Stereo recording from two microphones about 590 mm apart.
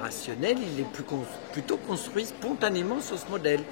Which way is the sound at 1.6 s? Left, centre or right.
Right.